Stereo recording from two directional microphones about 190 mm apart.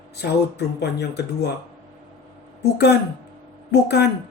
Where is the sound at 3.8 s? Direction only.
60° left (ahead or behind).